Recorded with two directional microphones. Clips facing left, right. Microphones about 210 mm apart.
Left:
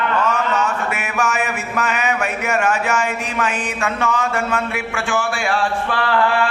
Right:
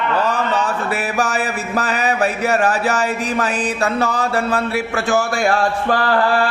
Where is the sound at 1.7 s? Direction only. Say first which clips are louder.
Right 2 dB; 35° right (ahead or behind).